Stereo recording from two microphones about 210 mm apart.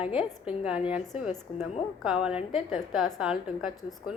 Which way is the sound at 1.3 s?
30° left (ahead or behind).